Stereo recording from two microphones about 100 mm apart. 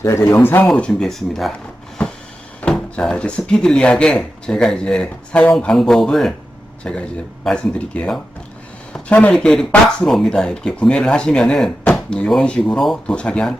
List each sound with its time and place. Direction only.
0.0 s speech: 30° left (ahead or behind)
0.6 s speech: 5° left (ahead or behind)
2.0 s a sound: 10° left (ahead or behind)
2.6 s speech: 10° left (ahead or behind)